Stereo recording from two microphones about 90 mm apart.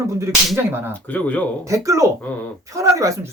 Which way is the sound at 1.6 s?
35° right (ahead or behind).